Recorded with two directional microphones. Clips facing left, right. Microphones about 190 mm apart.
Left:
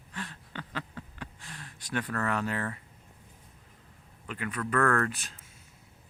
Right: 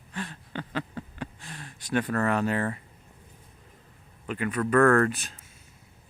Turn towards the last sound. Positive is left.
turn(degrees=-35)  # may be behind; listen again after turning